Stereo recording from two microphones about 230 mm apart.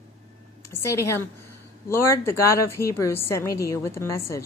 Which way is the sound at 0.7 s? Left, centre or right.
Centre.